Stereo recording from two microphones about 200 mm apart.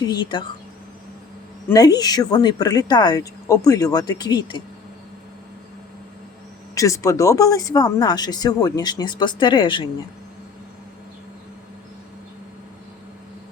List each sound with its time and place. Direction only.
0.0 s speech: 20° left (ahead or behind)
1.7 s speech: 20° left (ahead or behind)
6.7 s speech: 15° left (ahead or behind)